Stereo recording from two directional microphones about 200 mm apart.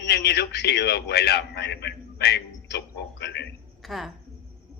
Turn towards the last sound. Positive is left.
turn(degrees=0)  # may be behind; listen again after turning